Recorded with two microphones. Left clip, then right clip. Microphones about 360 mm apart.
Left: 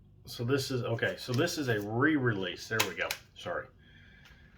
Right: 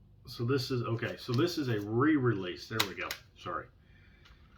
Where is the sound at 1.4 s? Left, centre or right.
Left.